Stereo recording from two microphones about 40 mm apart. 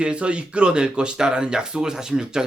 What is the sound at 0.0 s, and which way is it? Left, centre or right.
Speech, right.